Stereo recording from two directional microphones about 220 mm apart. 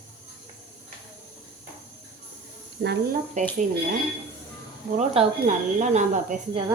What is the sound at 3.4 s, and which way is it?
Speech, 30° right (ahead or behind).